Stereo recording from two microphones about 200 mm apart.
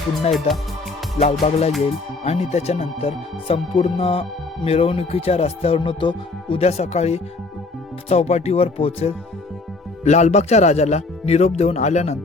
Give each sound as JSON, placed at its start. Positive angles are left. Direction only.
{"t": 0.3, "sound": "speech", "side_deg": 0}
{"t": 1.2, "sound": "speech", "side_deg": 30}